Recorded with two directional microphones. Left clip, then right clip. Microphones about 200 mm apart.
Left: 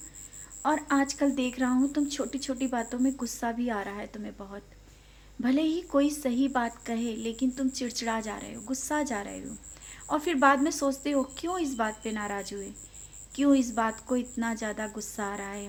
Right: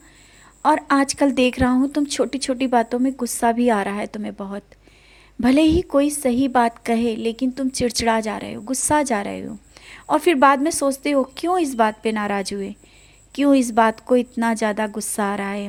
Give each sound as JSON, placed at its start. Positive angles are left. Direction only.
{"t": 0.6, "sound": "speech", "side_deg": -45}